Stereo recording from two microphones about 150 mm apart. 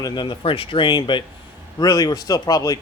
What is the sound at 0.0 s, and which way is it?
Speech, 30° left (ahead or behind).